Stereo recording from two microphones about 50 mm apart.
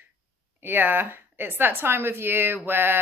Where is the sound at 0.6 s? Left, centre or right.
Right.